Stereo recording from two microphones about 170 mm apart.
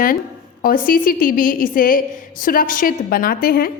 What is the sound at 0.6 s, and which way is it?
A woman's voice, 55° left (ahead or behind).